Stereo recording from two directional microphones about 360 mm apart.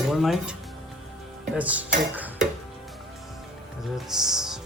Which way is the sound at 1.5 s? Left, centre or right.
Centre.